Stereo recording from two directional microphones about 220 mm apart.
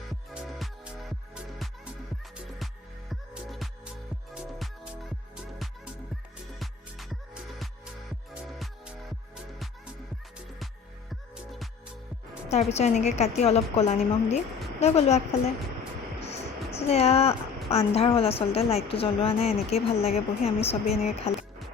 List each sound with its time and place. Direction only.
0.1 s music: centre (ahead or behind)
3.1 s music: centre (ahead or behind)
6.6 s music: centre (ahead or behind)
8.4 s music: centre (ahead or behind)
11.1 s music: centre (ahead or behind)
12.5 s a woman's voice: 30° left (ahead or behind)
16.2 s music: 30° left (ahead or behind)
17.7 s a woman's voice: 25° left (ahead or behind)
21.3 s music: 30° left (ahead or behind)